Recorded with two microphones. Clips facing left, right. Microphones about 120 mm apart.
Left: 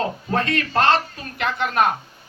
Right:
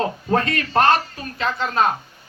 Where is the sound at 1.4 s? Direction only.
60° left (ahead or behind).